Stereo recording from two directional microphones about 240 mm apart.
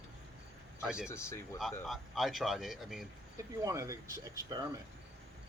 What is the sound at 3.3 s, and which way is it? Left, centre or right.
Speech, centre.